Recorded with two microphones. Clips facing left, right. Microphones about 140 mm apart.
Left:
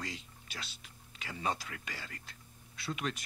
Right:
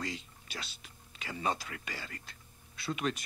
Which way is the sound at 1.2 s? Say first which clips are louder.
Right 2 dB; 20° right (ahead or behind).